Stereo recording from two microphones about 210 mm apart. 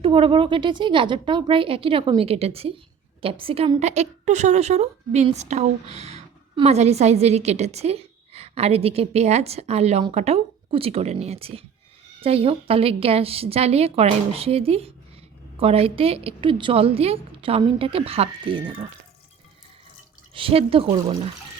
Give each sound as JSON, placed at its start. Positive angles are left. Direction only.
{"t": 0.0, "sound": "a woman's voice", "side_deg": -25}
{"t": 20.3, "sound": "a woman's voice", "side_deg": -25}